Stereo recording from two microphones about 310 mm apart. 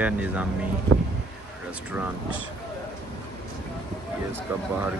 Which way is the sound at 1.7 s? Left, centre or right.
Centre.